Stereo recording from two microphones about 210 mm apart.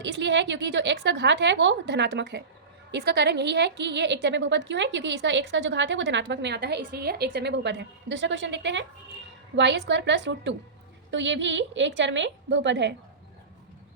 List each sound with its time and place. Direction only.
0.0 s a woman's voice: 55° right (ahead or behind)